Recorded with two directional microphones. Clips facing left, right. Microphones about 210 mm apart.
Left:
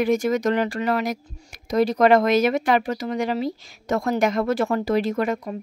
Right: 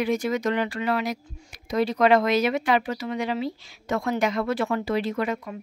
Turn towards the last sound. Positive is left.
turn(degrees=45)  # may be behind; listen again after turning